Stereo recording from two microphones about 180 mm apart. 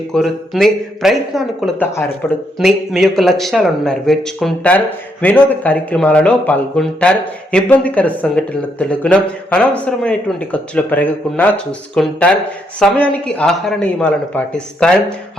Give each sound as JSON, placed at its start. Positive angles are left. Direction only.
{"t": 0.1, "sound": "speech", "side_deg": 0}
{"t": 1.8, "sound": "speech", "side_deg": 10}
{"t": 2.6, "sound": "speech", "side_deg": 0}